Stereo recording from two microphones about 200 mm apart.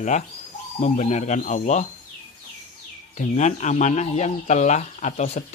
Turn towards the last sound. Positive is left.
turn(degrees=35)  # may be behind; listen again after turning